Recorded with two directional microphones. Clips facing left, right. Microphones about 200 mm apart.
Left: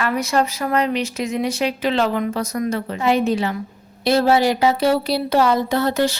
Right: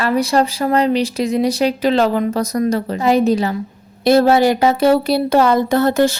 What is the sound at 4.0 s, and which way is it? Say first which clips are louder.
Speech: right 4 dB; 50° right (ahead or behind).